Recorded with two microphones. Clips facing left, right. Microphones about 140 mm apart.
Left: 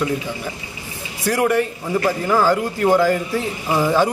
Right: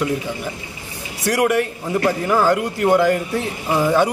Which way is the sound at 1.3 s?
5° right (ahead or behind).